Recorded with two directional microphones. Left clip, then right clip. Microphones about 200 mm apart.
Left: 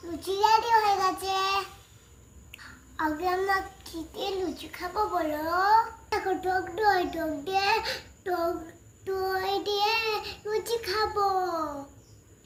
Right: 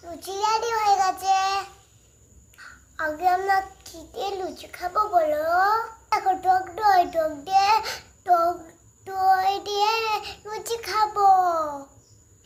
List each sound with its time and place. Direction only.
0.2 s child singing: 20° right (ahead or behind)
6.1 s child singing: 35° right (ahead or behind)